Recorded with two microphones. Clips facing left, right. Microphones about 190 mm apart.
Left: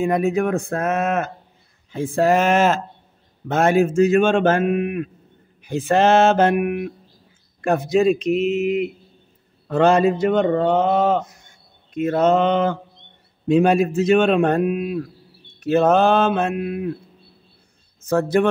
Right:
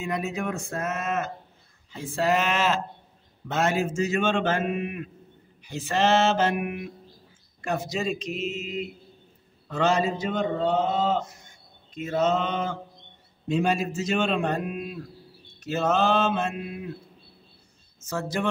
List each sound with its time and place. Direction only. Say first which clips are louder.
0.0 s a man's voice: left 10 dB; 55° left (ahead or behind); by 8.9 s 70° left (ahead or behind)
9.7 s a man's voice: left 8 dB; 55° left (ahead or behind)
18.0 s a man's voice: left 11 dB; 60° left (ahead or behind)